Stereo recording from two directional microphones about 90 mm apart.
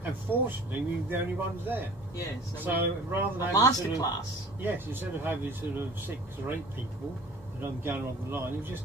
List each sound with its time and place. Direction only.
0.0 s speech: 20° right (ahead or behind)
3.3 s speech: 45° left (ahead or behind)
4.6 s speech: 20° right (ahead or behind)
7.8 s speech: 25° right (ahead or behind)